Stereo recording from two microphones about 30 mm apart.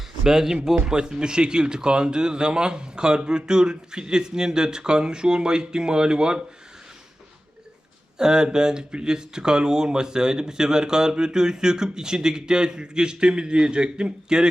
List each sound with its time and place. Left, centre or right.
0.3 s speech: centre
0.9 s speech: right
8.2 s speech: right